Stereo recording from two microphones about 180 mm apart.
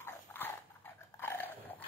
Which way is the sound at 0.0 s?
10° left (ahead or behind).